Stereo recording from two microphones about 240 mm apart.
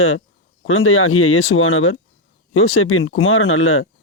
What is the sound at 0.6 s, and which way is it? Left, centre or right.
Speech, left.